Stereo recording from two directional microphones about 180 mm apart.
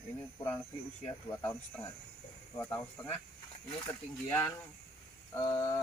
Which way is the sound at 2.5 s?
15° left (ahead or behind).